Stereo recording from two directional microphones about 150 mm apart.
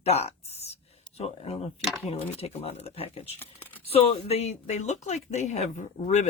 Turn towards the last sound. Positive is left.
turn(degrees=50)  # may be behind; listen again after turning